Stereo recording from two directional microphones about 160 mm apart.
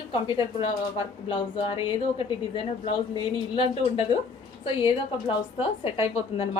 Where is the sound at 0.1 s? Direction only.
30° left (ahead or behind).